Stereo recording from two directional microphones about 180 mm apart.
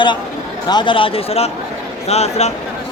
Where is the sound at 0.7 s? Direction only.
25° left (ahead or behind).